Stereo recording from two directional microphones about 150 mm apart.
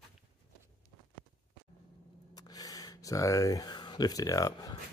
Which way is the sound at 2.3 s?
25° left (ahead or behind).